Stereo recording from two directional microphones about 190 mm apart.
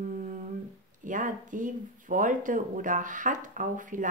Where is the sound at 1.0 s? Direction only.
45° right (ahead or behind).